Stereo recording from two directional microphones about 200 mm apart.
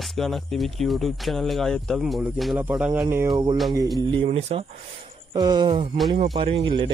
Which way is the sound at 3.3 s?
25° right (ahead or behind).